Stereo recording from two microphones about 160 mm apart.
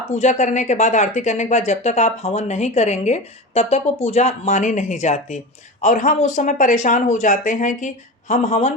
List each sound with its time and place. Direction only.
0.1 s speech: 45° left (ahead or behind)